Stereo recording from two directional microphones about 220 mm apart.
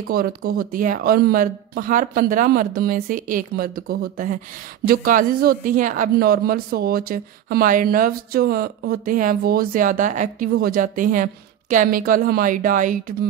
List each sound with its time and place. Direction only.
0.4 s speech: 40° right (ahead or behind)